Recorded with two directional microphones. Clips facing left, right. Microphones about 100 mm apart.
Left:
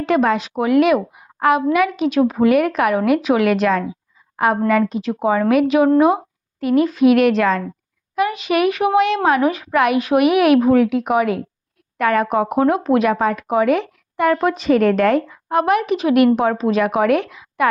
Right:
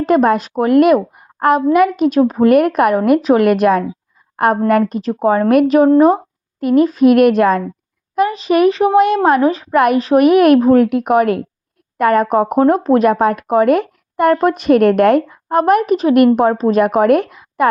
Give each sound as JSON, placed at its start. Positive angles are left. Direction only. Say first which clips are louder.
{"t": 0.0, "sound": "speech", "louder": "right 4 dB", "side_deg": -45}
{"t": 8.1, "sound": "speech", "louder": "right 4 dB", "side_deg": -35}
{"t": 9.7, "sound": "speech", "louder": "right 4 dB", "side_deg": -45}
{"t": 10.0, "sound": "speech", "louder": "right 4 dB", "side_deg": -35}
{"t": 10.3, "sound": "speech", "louder": "right 3 dB", "side_deg": -45}